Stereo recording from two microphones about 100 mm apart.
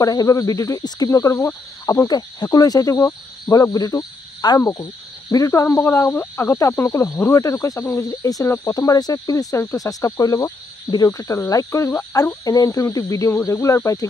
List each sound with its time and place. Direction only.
0.0 s speech: 40° left (ahead or behind)
2.0 s speech: 40° left (ahead or behind)